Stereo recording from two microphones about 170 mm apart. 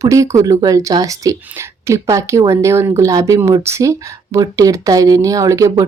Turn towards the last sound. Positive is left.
turn(degrees=-20)  # may be behind; listen again after turning